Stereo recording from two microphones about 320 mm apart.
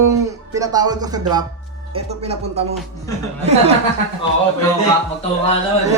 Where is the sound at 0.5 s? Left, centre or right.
Centre.